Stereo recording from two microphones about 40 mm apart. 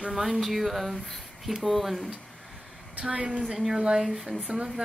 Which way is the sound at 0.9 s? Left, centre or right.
Centre.